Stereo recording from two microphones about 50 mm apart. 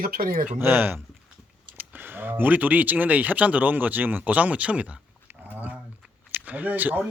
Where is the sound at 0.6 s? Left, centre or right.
Right.